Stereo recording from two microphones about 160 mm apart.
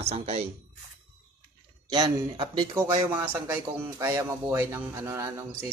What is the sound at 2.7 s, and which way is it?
Speech, 15° right (ahead or behind).